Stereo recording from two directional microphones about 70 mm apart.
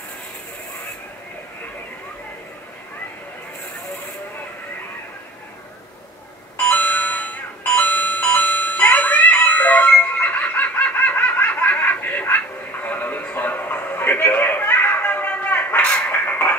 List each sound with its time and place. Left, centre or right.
6.7 s music: left
10.8 s snicker: left
12.8 s a sound: left